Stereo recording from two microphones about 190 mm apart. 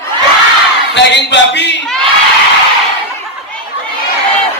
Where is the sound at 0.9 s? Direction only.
65° left (ahead or behind).